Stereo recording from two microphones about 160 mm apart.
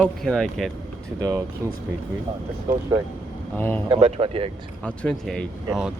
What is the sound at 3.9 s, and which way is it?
Speech, 40° right (ahead or behind).